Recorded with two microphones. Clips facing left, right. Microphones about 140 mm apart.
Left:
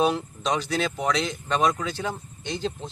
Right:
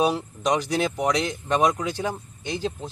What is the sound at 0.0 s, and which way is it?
Speech, 10° right (ahead or behind).